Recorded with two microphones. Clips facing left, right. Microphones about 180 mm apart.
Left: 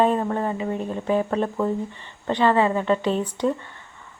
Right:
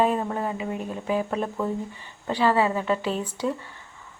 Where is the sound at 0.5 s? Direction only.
35° left (ahead or behind).